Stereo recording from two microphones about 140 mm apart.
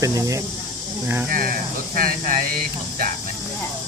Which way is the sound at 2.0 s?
75° right (ahead or behind).